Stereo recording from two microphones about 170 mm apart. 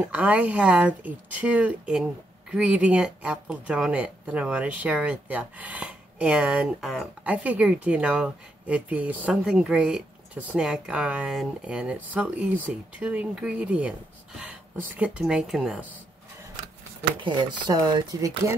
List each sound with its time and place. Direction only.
0.1 s speech: 10° right (ahead or behind)
17.2 s speech: 30° right (ahead or behind)